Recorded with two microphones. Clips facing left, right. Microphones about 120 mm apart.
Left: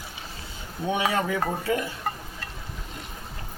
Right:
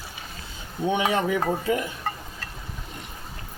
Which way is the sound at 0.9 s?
20° right (ahead or behind).